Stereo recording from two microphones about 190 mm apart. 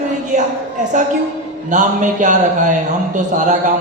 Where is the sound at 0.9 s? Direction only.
40° right (ahead or behind).